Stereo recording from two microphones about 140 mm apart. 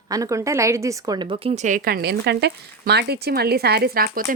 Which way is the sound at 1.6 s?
80° right.